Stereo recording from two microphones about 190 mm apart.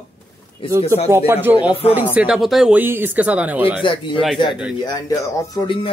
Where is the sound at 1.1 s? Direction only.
10° right (ahead or behind).